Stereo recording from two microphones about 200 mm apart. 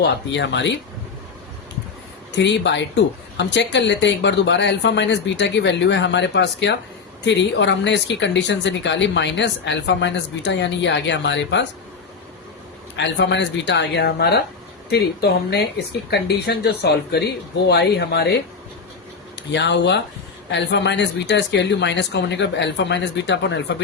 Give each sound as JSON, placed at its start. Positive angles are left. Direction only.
{"t": 0.0, "sound": "speech", "side_deg": 60}
{"t": 2.3, "sound": "speech", "side_deg": 60}
{"t": 13.0, "sound": "speech", "side_deg": 60}
{"t": 15.4, "sound": "speech", "side_deg": 55}
{"t": 19.4, "sound": "speech", "side_deg": 60}